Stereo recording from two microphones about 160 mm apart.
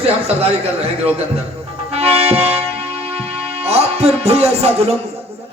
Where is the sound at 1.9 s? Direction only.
40° right (ahead or behind).